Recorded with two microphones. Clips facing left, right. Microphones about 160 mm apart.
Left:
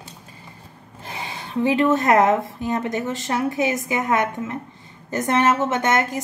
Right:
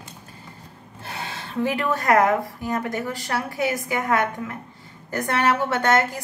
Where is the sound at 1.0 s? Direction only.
15° left (ahead or behind).